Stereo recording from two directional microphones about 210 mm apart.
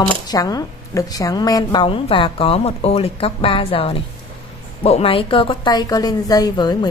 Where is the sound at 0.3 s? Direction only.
15° left (ahead or behind).